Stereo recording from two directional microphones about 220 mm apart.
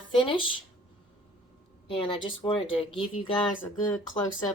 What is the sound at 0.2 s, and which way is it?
Speech, 25° left (ahead or behind).